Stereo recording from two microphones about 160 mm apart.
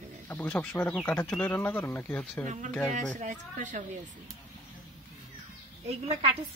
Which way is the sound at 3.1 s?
50° right (ahead or behind).